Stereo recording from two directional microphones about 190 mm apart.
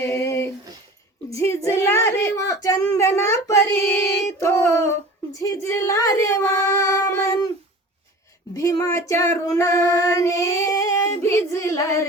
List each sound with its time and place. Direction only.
0.0 s a sound: 15° left (ahead or behind)
1.3 s speech: 15° left (ahead or behind)
8.5 s speech: 20° left (ahead or behind)